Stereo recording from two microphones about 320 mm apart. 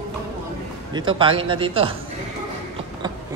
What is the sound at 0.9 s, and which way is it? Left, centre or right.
Speech, centre.